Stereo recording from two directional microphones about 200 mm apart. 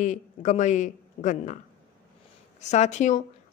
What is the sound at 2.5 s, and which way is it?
Speech, 35° left (ahead or behind).